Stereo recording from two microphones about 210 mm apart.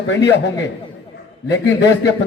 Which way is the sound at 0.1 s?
55° left (ahead or behind).